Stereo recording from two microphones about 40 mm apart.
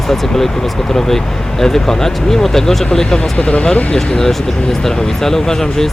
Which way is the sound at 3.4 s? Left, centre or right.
Left.